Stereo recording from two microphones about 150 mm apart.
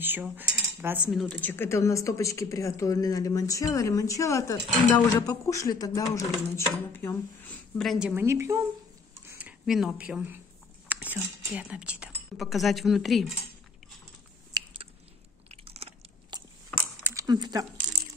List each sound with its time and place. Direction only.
0.0 s cutlery: 15° right (ahead or behind)
1.2 s speech: 10° left (ahead or behind)
8.1 s a woman's voice: 15° right (ahead or behind); by 13.4 s centre (ahead or behind)
15.4 s chewing: 40° right (ahead or behind)
16.3 s biting: 30° right (ahead or behind)
17.0 s a sound: 20° right (ahead or behind)